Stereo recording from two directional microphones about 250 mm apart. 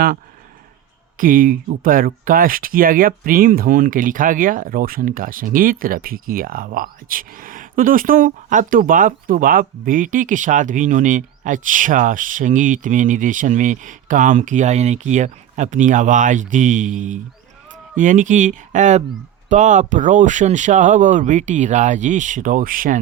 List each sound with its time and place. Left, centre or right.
1.2 s speech: right